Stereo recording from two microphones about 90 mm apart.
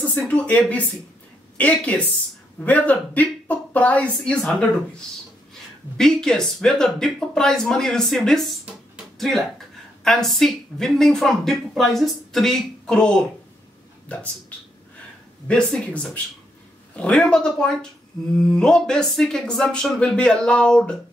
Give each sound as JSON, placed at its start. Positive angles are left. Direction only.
{"t": 0.1, "sound": "speech", "side_deg": 15}
{"t": 8.9, "sound": "a sound", "side_deg": 0}
{"t": 10.0, "sound": "speech", "side_deg": 0}
{"t": 15.4, "sound": "speech", "side_deg": 10}